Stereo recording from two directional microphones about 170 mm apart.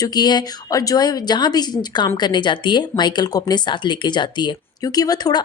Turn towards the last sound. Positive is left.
turn(degrees=25)  # may be behind; listen again after turning